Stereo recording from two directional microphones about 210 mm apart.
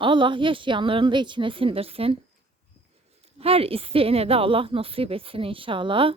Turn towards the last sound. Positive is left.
turn(degrees=-25)  # may be behind; listen again after turning